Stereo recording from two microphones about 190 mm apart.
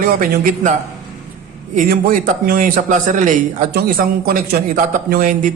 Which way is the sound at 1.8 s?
50° right (ahead or behind).